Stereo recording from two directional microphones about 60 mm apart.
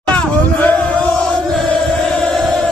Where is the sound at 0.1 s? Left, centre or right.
Left.